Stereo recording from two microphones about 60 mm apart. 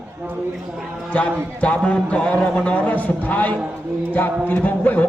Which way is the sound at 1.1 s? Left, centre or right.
Left.